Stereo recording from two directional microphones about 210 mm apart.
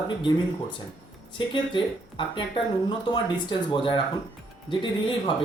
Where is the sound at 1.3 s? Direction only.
25° left (ahead or behind).